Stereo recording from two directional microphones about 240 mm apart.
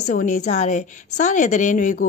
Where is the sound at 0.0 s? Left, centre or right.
Left.